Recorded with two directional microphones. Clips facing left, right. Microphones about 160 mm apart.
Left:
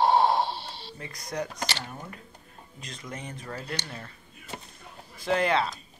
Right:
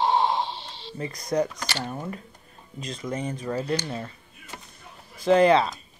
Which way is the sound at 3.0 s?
20° right (ahead or behind).